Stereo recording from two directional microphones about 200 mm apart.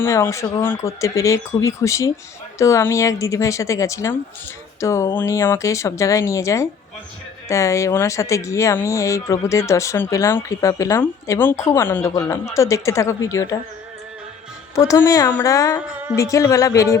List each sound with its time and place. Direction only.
0.0 s speech: 15° left (ahead or behind)
14.8 s speech: 15° left (ahead or behind)